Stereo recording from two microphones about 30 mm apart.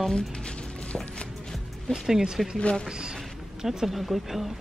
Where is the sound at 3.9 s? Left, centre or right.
Centre.